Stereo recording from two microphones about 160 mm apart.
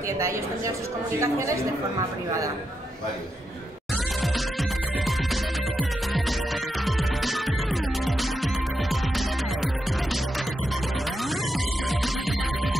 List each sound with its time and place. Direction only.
1.2 s a woman's voice: 20° right (ahead or behind)
5.0 s music: centre (ahead or behind)
11.9 s music: centre (ahead or behind)